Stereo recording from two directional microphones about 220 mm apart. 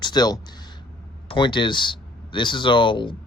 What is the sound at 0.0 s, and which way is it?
Speech, 20° left (ahead or behind).